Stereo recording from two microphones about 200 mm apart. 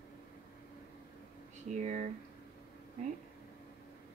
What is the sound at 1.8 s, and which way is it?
Speech, 35° right (ahead or behind).